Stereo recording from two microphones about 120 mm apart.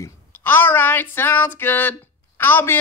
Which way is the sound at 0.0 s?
20° left (ahead or behind).